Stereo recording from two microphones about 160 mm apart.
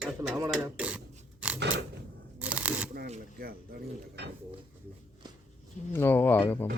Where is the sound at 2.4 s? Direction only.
10° right (ahead or behind).